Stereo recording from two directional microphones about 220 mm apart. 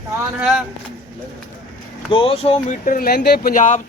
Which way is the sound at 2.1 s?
25° left (ahead or behind).